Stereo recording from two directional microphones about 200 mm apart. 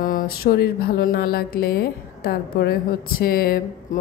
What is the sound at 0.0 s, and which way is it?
Speech, 45° left (ahead or behind).